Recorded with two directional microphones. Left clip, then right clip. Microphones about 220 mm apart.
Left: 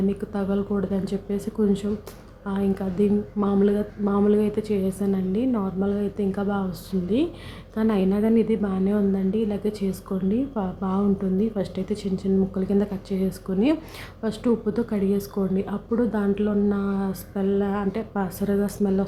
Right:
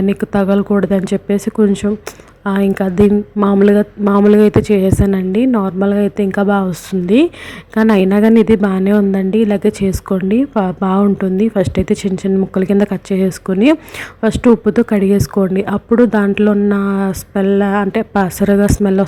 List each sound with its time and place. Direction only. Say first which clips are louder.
0.1 s speech: right 13 dB; 35° right (ahead or behind)